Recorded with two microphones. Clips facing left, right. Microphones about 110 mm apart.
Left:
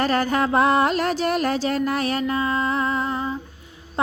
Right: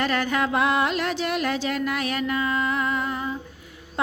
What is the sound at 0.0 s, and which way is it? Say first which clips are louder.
Female singing: left 3 dB; 35° left (ahead or behind).